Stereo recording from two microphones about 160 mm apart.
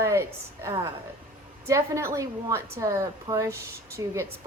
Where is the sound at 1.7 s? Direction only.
20° right (ahead or behind).